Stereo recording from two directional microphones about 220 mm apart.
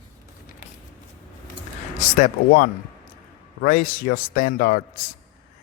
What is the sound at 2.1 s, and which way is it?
Speech, 35° left (ahead or behind).